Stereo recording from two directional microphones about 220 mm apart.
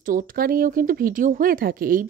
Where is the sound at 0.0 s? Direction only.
40° right (ahead or behind).